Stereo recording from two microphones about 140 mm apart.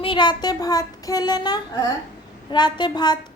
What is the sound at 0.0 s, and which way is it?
Child singing, 35° left (ahead or behind).